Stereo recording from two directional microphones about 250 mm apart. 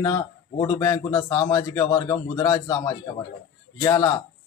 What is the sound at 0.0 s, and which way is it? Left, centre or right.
A man's voice, centre.